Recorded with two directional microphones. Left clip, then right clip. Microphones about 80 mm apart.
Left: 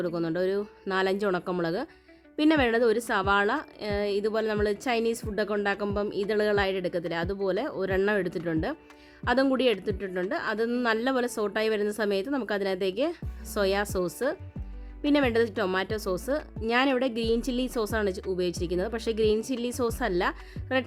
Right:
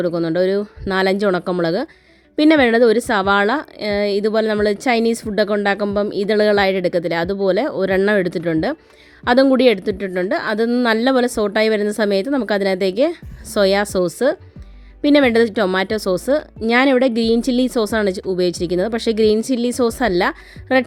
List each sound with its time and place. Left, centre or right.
0.0 s speech: right